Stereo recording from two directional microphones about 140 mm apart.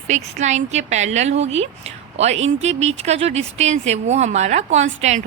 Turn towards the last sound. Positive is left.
turn(degrees=-55)  # may be behind; listen again after turning